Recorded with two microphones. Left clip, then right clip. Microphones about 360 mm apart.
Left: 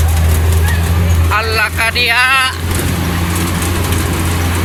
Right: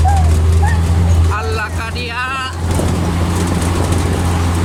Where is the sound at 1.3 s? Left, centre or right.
Centre.